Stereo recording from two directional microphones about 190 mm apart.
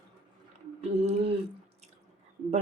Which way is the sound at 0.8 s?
35° right (ahead or behind).